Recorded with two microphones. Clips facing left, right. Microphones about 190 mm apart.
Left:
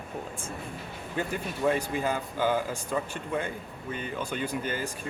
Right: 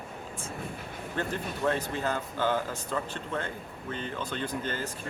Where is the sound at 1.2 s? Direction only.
10° left (ahead or behind).